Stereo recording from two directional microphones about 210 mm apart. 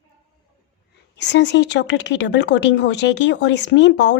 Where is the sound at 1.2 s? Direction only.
55° left (ahead or behind).